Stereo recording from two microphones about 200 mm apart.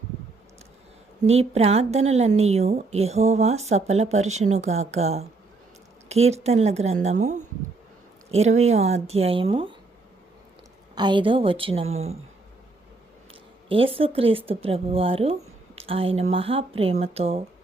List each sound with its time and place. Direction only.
1.3 s a woman's voice: 30° right (ahead or behind)
10.9 s speech: 20° right (ahead or behind)
13.7 s speech: 25° right (ahead or behind)